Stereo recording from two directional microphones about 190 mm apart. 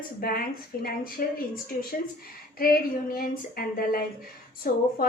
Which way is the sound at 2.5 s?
50° left (ahead or behind).